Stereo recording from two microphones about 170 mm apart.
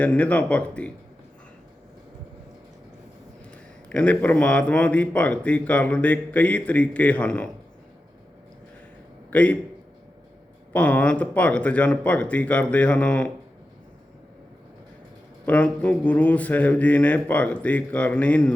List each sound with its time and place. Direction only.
0.0 s speech: 10° left (ahead or behind)
3.8 s speech: 5° left (ahead or behind)
9.3 s a man's voice: 10° left (ahead or behind)
10.7 s speech: 10° left (ahead or behind)
15.4 s speech: 10° left (ahead or behind)